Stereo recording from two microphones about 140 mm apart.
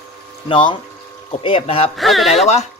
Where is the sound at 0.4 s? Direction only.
35° left (ahead or behind).